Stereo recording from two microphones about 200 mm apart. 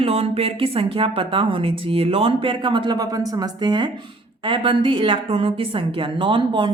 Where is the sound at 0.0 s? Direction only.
30° right (ahead or behind).